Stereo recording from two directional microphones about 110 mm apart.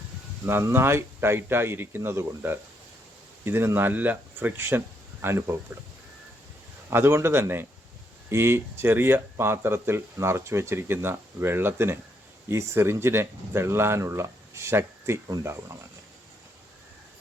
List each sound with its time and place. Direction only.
0.4 s speech: 20° right (ahead or behind)
6.9 s speech: 20° right (ahead or behind)